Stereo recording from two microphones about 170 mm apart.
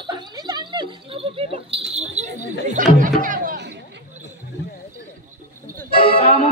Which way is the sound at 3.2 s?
55° right (ahead or behind).